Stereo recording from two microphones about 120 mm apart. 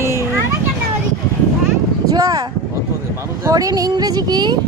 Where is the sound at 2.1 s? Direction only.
30° right (ahead or behind).